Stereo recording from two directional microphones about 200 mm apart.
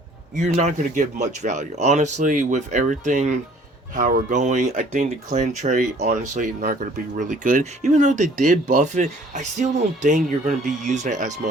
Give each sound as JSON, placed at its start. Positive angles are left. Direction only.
{"t": 0.3, "sound": "speech", "side_deg": -35}